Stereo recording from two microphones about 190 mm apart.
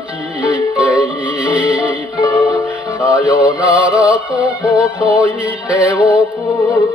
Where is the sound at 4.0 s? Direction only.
5° right (ahead or behind).